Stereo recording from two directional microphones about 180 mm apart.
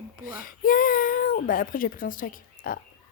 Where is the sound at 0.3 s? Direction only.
50° left (ahead or behind).